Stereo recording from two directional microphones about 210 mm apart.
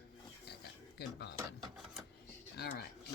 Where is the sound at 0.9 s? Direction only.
55° left (ahead or behind).